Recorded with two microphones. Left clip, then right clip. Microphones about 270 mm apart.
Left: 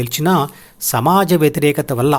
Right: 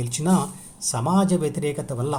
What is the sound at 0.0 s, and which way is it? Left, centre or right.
Speech, left.